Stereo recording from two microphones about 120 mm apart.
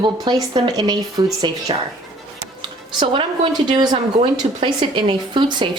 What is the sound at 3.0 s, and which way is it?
Speech, 45° right (ahead or behind).